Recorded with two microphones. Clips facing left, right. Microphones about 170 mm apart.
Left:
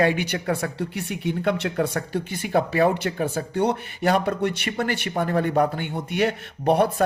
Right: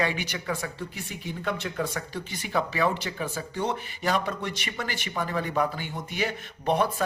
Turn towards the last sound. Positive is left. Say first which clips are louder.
# left 5 dB
turn(degrees=60)  # may be behind; listen again after turning